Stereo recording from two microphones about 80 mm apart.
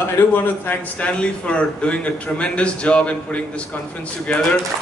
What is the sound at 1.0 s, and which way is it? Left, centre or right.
A man's voice, centre.